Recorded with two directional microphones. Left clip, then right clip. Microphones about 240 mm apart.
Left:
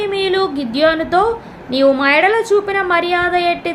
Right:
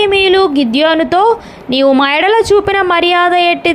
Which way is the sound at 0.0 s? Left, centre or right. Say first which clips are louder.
Right 7 dB; right.